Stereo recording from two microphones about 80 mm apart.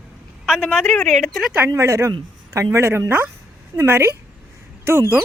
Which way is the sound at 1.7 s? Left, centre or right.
Right.